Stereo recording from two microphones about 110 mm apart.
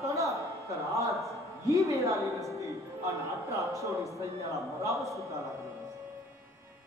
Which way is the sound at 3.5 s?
30° right (ahead or behind).